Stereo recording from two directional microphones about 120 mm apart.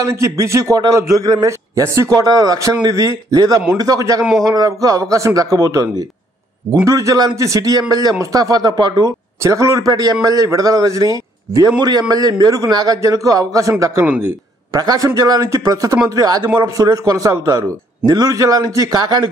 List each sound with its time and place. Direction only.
0.0 s a man's voice: 25° right (ahead or behind)
9.4 s a man's voice: 25° right (ahead or behind)
14.0 s speech: 10° right (ahead or behind)
14.7 s speech: 35° right (ahead or behind)